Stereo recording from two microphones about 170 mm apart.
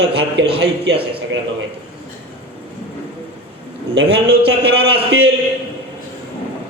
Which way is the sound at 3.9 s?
75° right (ahead or behind).